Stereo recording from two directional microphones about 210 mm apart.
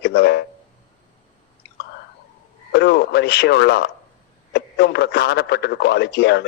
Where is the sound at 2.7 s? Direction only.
50° left (ahead or behind).